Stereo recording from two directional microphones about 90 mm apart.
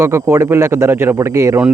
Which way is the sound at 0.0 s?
35° right (ahead or behind).